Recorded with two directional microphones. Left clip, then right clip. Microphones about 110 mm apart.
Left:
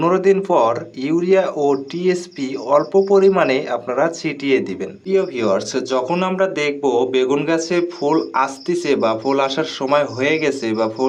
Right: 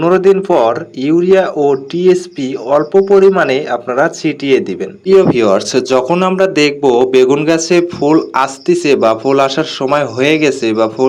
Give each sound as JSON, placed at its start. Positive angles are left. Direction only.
{"t": 0.0, "sound": "speech", "side_deg": -25}
{"t": 5.0, "sound": "speech", "side_deg": -60}